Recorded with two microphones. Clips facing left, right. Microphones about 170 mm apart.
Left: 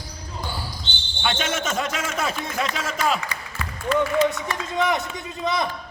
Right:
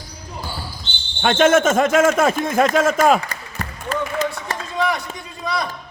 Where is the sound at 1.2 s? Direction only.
50° right (ahead or behind).